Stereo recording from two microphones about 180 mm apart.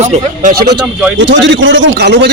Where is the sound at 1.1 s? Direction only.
85° right.